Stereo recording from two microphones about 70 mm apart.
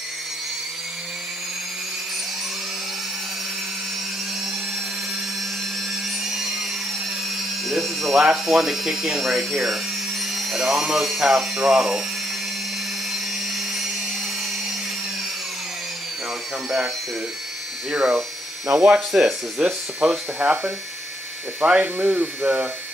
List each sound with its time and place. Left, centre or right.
6.2 s a sound: centre
7.6 s speech: centre
17.9 s speech: centre
21.8 s speech: right